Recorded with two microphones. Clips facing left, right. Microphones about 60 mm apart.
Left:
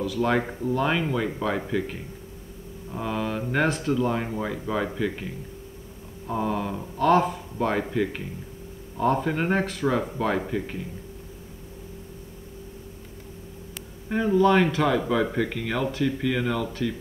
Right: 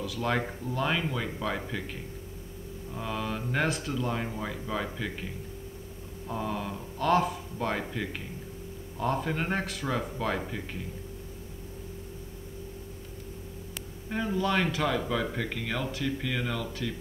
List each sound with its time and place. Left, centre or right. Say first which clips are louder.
0.0 s speech: left 6 dB; centre
0.4 s speech: left 5 dB; left
0.7 s speech: left 6 dB; centre
6.2 s speech: left 6 dB; centre
14.0 s speech: left 9 dB; centre